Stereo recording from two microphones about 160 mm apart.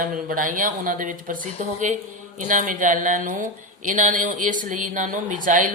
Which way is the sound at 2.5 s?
55° right (ahead or behind).